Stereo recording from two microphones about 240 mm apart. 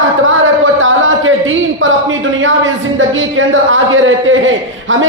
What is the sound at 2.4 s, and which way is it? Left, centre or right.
A woman's voice, right.